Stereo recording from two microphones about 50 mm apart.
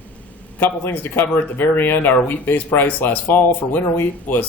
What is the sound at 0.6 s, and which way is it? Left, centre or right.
Speech, left.